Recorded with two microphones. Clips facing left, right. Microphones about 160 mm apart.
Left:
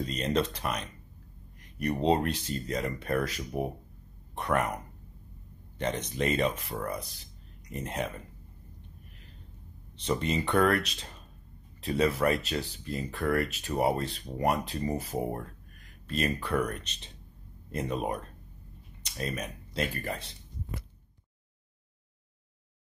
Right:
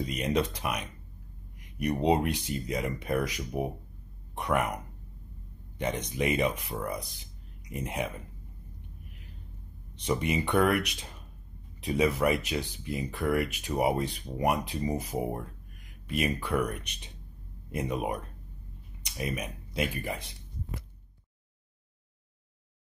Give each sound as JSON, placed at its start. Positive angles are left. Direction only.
{"t": 0.0, "sound": "speech", "side_deg": -10}
{"t": 9.9, "sound": "speech", "side_deg": -15}